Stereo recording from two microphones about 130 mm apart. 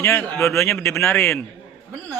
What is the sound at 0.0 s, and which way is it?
A man's voice, 20° left (ahead or behind).